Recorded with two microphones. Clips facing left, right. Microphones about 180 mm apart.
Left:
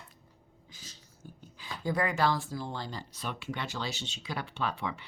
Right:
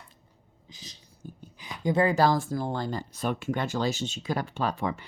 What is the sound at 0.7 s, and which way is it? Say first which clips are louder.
Speech: right 5 dB; 15° right (ahead or behind).